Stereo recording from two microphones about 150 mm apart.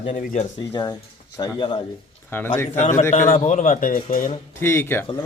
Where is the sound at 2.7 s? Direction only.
50° left (ahead or behind).